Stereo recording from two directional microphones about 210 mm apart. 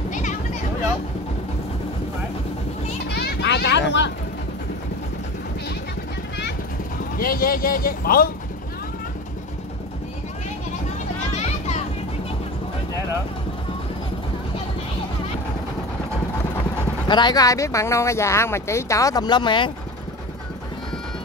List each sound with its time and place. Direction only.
0.1 s a sound: 35° left (ahead or behind)
3.1 s children playing: 50° left (ahead or behind)
7.2 s speech: 45° left (ahead or behind)
11.3 s music: 30° left (ahead or behind)
17.1 s speech: 20° left (ahead or behind)